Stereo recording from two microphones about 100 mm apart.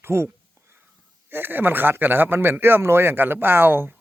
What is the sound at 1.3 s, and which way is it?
Speech, 20° right (ahead or behind).